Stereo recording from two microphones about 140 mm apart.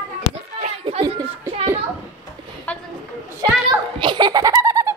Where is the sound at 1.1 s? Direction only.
40° right (ahead or behind).